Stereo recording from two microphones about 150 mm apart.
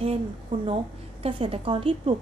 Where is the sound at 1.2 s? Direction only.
40° right (ahead or behind).